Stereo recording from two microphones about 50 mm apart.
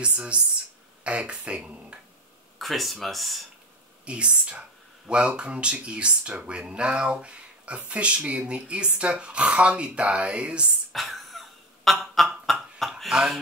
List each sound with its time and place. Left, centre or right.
0.0 s speech: right
2.6 s speech: centre
4.0 s speech: right
10.9 s a sound: centre